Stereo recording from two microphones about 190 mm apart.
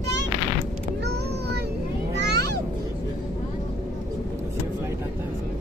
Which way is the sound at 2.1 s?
60° right (ahead or behind).